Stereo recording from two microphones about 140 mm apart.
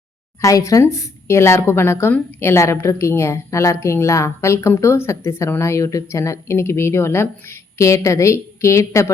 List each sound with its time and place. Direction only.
0.4 s a woman's voice: 25° left (ahead or behind)